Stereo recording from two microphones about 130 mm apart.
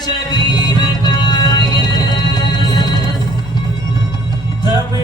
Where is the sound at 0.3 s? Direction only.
35° left (ahead or behind).